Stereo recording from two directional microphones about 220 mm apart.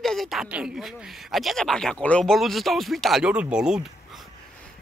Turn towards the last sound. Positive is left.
turn(degrees=-5)  # may be behind; listen again after turning